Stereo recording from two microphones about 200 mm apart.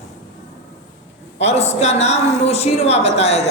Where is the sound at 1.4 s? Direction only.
30° left (ahead or behind).